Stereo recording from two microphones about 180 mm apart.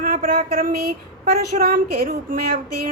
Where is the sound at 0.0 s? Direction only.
50° right (ahead or behind).